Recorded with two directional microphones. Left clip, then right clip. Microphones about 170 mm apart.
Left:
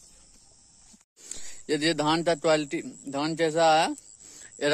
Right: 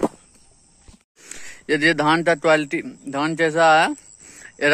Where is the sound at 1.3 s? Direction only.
5° left (ahead or behind).